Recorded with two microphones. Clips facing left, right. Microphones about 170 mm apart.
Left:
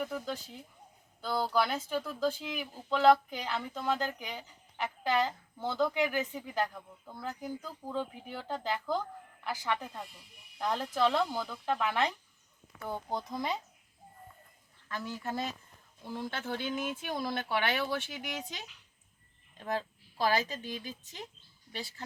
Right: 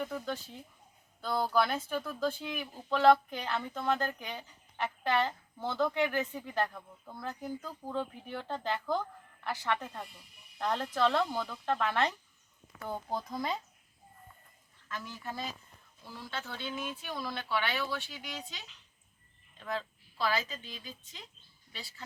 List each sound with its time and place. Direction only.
0.0 s speech: 10° left (ahead or behind)
1.5 s speech: 15° left (ahead or behind)
13.1 s speech: centre (ahead or behind)
14.9 s speech: 45° left (ahead or behind)